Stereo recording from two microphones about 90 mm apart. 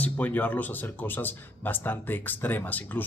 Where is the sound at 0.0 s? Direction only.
20° left (ahead or behind).